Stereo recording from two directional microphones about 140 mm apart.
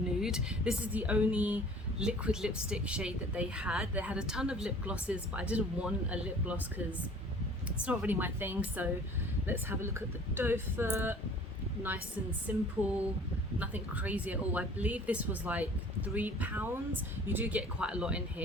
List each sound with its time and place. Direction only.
0.2 s a woman's voice: 5° right (ahead or behind)
12.5 s a woman's voice: 15° right (ahead or behind)